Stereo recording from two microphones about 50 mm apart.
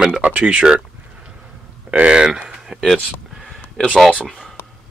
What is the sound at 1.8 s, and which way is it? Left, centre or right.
Speech, right.